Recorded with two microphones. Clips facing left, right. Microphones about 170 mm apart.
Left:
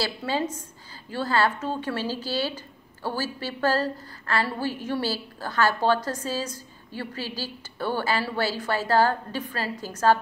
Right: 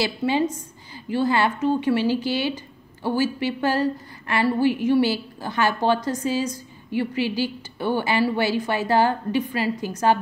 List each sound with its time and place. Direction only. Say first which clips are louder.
0.0 s speech: right 5 dB; 15° right (ahead or behind)